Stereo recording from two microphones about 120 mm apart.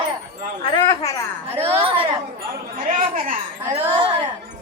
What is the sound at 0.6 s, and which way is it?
Wind chime, 40° left (ahead or behind).